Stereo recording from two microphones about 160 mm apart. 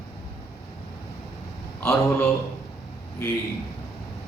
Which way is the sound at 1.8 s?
15° left (ahead or behind).